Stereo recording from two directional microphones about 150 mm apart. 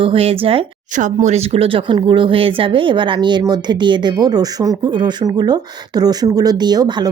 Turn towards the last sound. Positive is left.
turn(degrees=-25)  # may be behind; listen again after turning